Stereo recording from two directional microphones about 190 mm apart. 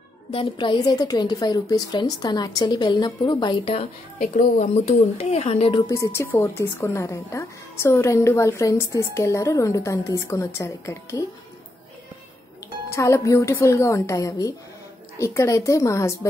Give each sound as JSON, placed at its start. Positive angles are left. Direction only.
{"t": 0.3, "sound": "a woman's voice", "side_deg": 25}
{"t": 4.2, "sound": "speech", "side_deg": 45}
{"t": 5.9, "sound": "a woman's voice", "side_deg": 15}
{"t": 12.9, "sound": "a woman's voice", "side_deg": 15}